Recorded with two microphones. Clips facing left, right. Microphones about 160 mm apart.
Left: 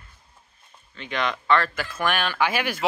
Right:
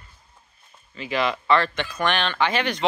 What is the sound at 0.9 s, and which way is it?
Speech, 5° right (ahead or behind).